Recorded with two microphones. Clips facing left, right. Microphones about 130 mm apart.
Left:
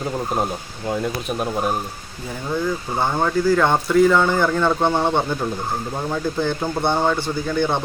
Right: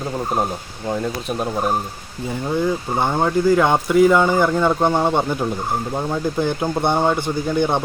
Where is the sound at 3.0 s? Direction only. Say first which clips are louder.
Right 1 dB; 20° right (ahead or behind).